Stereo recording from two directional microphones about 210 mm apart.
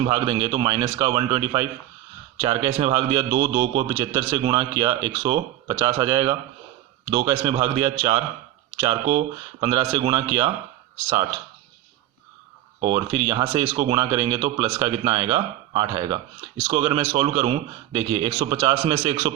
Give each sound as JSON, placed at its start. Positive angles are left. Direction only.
{"t": 0.0, "sound": "speech", "side_deg": -20}
{"t": 12.8, "sound": "speech", "side_deg": -20}